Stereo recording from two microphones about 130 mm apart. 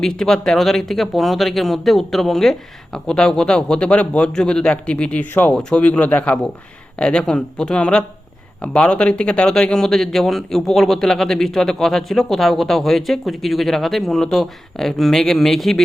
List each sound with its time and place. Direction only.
0.0 s speech: 5° left (ahead or behind)